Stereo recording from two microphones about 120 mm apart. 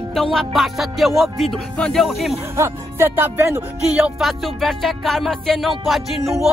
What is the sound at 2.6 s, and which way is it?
Speech, 20° right (ahead or behind).